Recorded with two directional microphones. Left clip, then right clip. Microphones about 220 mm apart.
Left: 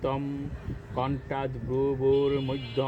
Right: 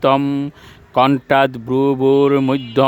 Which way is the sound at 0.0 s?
55° right (ahead or behind).